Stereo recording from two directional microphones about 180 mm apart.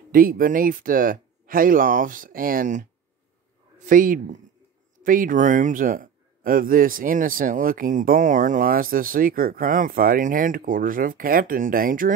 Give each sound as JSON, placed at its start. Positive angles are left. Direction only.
{"t": 0.1, "sound": "a man's voice", "side_deg": -50}